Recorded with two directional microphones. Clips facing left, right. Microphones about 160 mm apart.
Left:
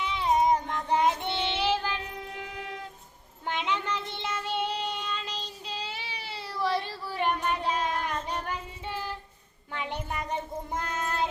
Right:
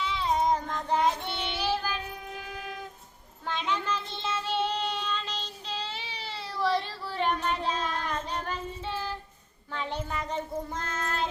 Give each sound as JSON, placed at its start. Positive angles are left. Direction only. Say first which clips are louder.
{"t": 0.0, "sound": "child singing", "louder": "left 2 dB", "side_deg": 15}